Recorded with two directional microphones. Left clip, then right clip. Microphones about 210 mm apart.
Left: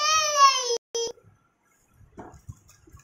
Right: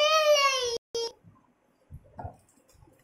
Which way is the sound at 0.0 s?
20° right (ahead or behind).